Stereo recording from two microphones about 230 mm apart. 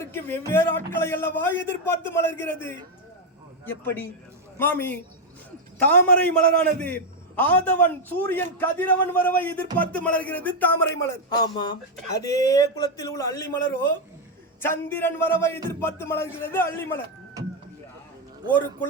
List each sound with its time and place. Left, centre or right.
0.0 s a man's voice: centre
14.6 s a man's voice: centre